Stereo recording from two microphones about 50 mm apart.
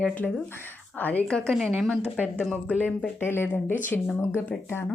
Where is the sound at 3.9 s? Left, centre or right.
Left.